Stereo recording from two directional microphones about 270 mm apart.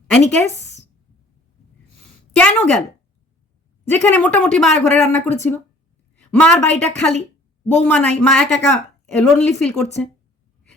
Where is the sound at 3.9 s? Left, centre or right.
Centre.